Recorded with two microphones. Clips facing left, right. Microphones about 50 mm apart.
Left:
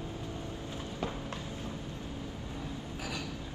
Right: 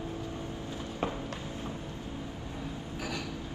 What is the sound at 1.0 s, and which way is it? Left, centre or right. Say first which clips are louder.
Music: right 4 dB; right.